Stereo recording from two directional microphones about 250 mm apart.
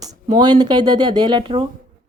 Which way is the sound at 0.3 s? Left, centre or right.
Centre.